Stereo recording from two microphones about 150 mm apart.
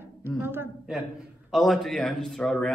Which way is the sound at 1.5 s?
Centre (ahead or behind).